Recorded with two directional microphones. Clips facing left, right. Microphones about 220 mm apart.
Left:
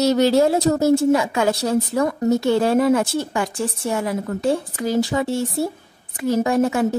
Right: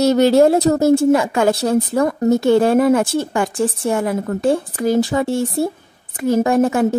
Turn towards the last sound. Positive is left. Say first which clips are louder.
# right 3 dB
turn(degrees=-50)  # may be behind; listen again after turning